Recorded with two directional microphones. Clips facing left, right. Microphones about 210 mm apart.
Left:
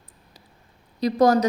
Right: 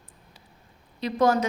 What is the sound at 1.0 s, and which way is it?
Speech, 40° left (ahead or behind).